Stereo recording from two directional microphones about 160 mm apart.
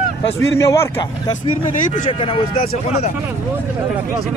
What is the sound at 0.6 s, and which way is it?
Speech, 20° left (ahead or behind).